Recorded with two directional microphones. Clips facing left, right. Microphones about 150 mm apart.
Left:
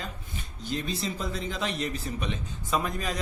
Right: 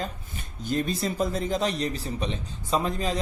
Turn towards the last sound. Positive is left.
turn(degrees=-25)  # may be behind; listen again after turning